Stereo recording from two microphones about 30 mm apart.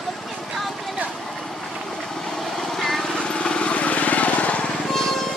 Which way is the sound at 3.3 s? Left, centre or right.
Left.